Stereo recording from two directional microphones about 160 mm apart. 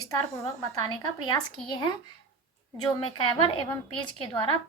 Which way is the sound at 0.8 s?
25° left (ahead or behind).